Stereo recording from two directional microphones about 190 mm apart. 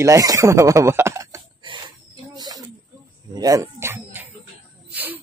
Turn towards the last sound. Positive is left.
turn(degrees=-10)  # may be behind; listen again after turning